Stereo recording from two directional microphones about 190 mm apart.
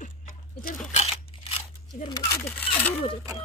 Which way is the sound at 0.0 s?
45° left (ahead or behind).